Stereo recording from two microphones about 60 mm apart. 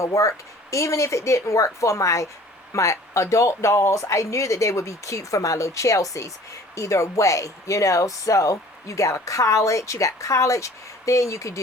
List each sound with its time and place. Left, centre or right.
0.0 s speech: left